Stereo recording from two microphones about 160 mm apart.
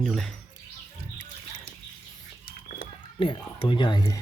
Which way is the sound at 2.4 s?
65° left (ahead or behind).